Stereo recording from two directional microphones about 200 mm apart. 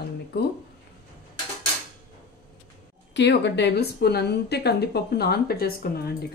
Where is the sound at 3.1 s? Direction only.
60° left (ahead or behind).